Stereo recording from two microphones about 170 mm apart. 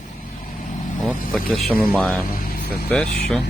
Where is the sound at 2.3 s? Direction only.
55° left (ahead or behind).